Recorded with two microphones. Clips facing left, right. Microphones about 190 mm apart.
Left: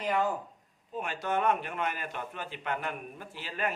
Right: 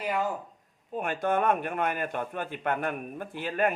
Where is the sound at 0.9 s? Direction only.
55° right (ahead or behind).